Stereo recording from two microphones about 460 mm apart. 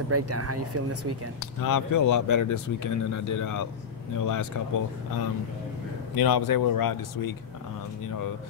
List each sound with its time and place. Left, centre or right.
0.1 s speech: right
1.6 s speech: left
6.1 s speech: left